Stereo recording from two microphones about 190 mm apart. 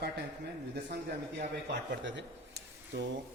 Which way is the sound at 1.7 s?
65° right (ahead or behind).